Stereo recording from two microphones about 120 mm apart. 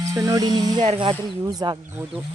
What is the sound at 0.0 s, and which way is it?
Speech, 25° right (ahead or behind).